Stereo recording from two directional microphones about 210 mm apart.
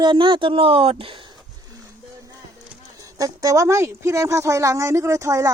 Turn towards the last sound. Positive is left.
turn(degrees=-15)  # may be behind; listen again after turning